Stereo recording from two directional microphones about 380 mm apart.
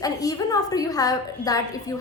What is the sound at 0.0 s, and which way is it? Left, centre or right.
A woman's voice, centre.